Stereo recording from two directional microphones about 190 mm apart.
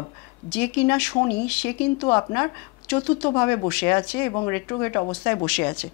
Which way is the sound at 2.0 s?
20° left (ahead or behind).